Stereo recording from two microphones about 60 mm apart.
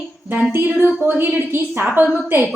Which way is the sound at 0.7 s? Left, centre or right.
Right.